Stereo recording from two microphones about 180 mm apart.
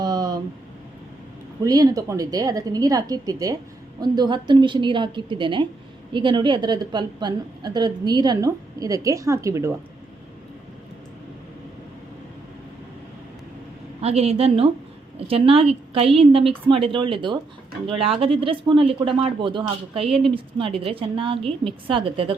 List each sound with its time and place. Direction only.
0.0 s a sound: 20° right (ahead or behind)
1.6 s a woman's voice: 20° right (ahead or behind)
14.0 s a woman's voice: 35° right (ahead or behind)